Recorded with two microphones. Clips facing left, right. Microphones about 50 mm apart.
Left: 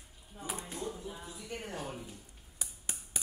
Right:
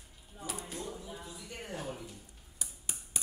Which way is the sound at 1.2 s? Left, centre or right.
Left.